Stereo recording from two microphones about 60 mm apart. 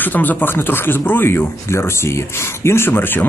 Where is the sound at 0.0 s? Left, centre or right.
Left.